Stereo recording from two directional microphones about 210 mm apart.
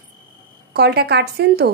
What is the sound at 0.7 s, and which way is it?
Speech, 50° right (ahead or behind).